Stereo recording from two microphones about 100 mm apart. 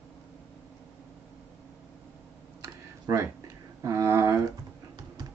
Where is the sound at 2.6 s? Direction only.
35° right (ahead or behind).